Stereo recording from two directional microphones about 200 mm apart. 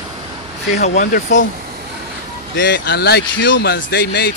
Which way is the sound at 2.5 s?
60° left (ahead or behind).